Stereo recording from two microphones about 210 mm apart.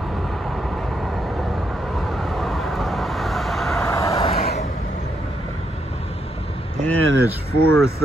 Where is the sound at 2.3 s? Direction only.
Centre (ahead or behind).